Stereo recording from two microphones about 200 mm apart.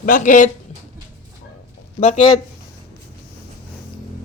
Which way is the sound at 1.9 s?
35° left (ahead or behind).